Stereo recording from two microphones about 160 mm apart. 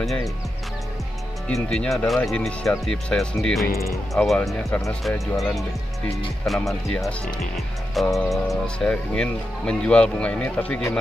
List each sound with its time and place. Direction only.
1.5 s speech: centre (ahead or behind)
3.7 s speech: 20° left (ahead or behind)
4.1 s speech: 5° left (ahead or behind)
4.6 s speech: 20° left (ahead or behind)
6.4 s speech: centre (ahead or behind)